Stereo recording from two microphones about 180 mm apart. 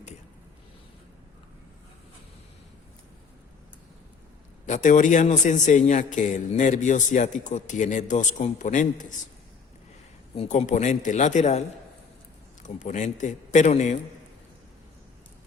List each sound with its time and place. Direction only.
4.6 s a man's voice: 45° left (ahead or behind)
10.3 s speech: 35° left (ahead or behind)
12.6 s a man's voice: 40° left (ahead or behind)